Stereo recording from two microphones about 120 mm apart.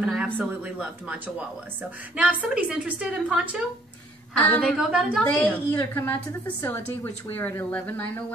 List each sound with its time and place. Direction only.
0.0 s a sound: 5° right (ahead or behind)
0.4 s a woman's voice: 10° right (ahead or behind)
4.4 s a woman's voice: 10° left (ahead or behind)
4.7 s speech: 5° right (ahead or behind)
5.2 s a woman's voice: 15° left (ahead or behind)